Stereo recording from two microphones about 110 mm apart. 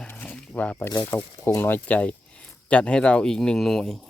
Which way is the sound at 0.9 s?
30° left (ahead or behind).